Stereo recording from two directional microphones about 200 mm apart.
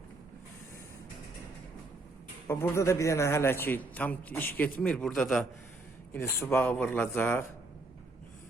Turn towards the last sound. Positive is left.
turn(degrees=10)  # may be behind; listen again after turning